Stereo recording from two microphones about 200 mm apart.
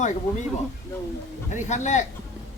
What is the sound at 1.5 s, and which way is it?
Speech, 35° left (ahead or behind).